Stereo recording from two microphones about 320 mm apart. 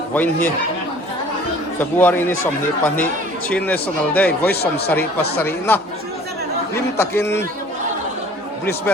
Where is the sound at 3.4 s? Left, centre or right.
Centre.